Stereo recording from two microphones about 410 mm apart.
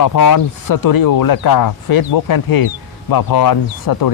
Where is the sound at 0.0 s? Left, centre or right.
Left.